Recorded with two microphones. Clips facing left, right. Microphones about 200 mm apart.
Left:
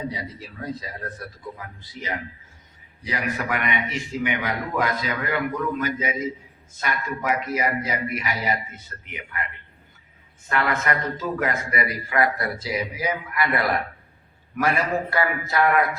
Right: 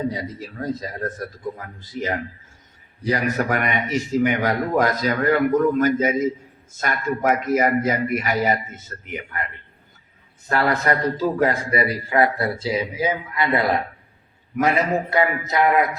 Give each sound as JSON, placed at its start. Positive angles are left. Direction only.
{"t": 0.1, "sound": "a man's voice", "side_deg": -45}
{"t": 10.5, "sound": "a man's voice", "side_deg": -35}